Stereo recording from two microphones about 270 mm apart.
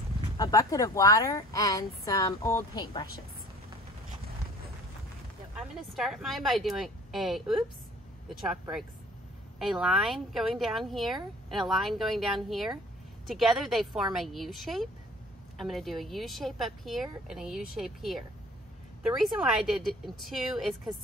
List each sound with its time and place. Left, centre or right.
0.4 s speech: centre
5.6 s speech: centre